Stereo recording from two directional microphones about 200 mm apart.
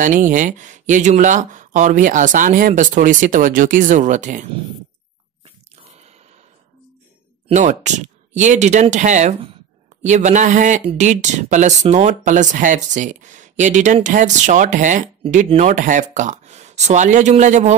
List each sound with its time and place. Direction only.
0.0 s speech: 40° right (ahead or behind)
5.8 s a sound: 35° right (ahead or behind)
7.4 s speech: 35° right (ahead or behind)